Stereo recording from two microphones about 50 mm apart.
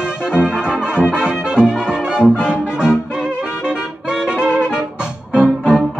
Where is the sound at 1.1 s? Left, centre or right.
Centre.